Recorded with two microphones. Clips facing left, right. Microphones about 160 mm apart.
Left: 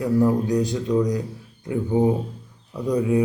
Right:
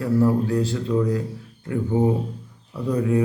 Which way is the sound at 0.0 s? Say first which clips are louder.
Even; 15° left (ahead or behind).